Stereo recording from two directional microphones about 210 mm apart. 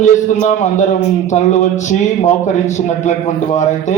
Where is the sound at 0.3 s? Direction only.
35° left (ahead or behind).